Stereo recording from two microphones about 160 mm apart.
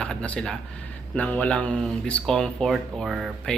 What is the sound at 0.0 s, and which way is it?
Speech, 5° left (ahead or behind).